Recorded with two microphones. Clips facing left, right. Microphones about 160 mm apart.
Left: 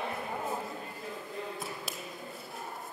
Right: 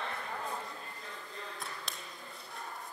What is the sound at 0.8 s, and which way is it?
Music, 10° left (ahead or behind).